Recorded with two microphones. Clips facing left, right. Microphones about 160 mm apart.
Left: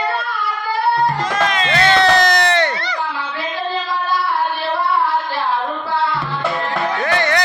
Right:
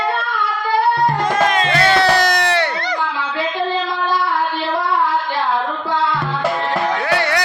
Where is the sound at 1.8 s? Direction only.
10° right (ahead or behind).